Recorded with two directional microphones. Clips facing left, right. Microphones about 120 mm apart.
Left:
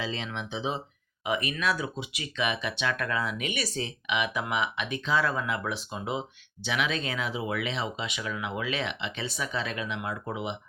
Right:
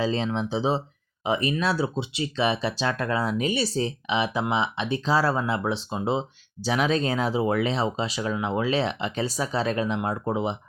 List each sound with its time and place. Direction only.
0.0 s speech: 35° right (ahead or behind)